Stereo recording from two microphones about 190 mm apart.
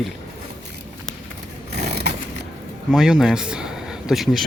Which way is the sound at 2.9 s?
5° right (ahead or behind).